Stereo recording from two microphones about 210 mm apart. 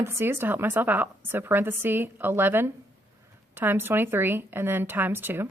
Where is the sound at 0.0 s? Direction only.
10° right (ahead or behind).